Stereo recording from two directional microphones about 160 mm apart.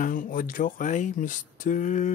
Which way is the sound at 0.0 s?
60° left (ahead or behind).